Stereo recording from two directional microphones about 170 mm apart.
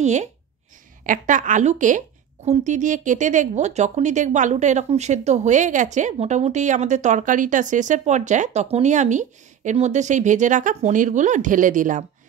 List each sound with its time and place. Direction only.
0.0 s a woman's voice: 40° right (ahead or behind)